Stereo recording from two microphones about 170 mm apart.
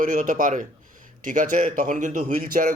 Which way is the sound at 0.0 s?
50° right (ahead or behind).